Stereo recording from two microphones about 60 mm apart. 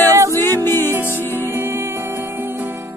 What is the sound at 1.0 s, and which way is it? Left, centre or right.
Music, right.